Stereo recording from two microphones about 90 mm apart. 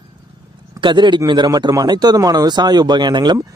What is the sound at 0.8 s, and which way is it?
Speech, 60° right (ahead or behind).